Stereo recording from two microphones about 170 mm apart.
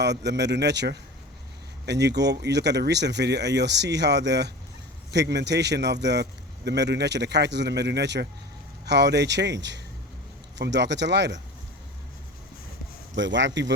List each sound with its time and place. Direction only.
0.0 s speech: 90° right
13.1 s speech: 90° right